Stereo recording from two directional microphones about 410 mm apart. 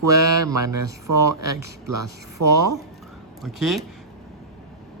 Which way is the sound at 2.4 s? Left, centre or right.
Right.